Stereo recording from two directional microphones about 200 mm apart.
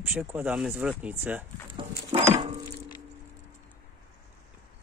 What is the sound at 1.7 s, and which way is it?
Dog, 25° right (ahead or behind).